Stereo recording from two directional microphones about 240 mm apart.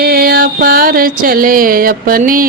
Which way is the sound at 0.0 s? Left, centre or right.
Right.